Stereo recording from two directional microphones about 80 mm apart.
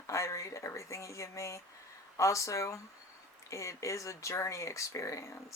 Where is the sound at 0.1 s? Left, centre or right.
Left.